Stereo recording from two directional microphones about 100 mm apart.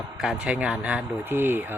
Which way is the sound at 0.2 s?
5° right (ahead or behind).